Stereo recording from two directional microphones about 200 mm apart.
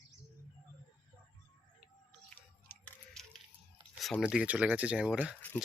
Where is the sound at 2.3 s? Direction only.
10° left (ahead or behind).